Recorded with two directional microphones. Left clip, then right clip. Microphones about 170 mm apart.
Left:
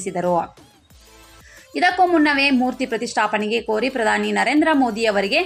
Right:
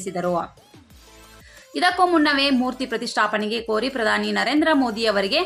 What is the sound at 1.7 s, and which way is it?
A woman's voice, 10° left (ahead or behind).